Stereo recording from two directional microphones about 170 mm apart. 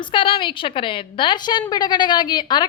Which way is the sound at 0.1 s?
30° left (ahead or behind).